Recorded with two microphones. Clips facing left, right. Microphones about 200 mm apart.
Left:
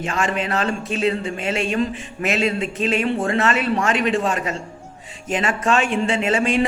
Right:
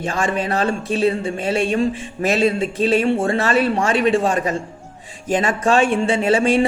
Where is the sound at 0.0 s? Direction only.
35° right (ahead or behind).